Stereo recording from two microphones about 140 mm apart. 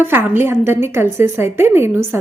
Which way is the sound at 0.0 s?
15° right (ahead or behind).